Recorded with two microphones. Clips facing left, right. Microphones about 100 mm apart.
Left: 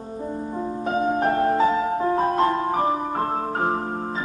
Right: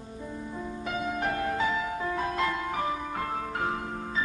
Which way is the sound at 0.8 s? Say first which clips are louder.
Left 9 dB; 40° left (ahead or behind).